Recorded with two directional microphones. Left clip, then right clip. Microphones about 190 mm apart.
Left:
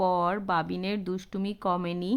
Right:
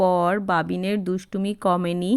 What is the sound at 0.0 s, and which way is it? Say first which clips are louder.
Speech: right 6 dB; 20° right (ahead or behind).